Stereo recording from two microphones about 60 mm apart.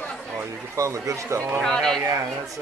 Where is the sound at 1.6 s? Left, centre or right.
Centre.